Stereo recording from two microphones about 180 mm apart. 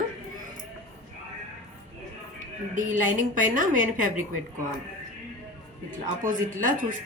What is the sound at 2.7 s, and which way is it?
A woman's voice, 45° right (ahead or behind).